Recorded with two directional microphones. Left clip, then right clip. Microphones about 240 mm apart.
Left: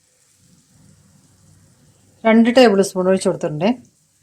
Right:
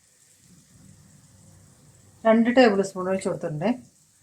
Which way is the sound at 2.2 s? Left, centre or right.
Left.